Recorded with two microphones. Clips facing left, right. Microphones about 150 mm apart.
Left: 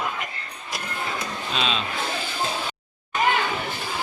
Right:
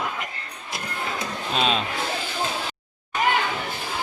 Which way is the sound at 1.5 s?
50° right (ahead or behind).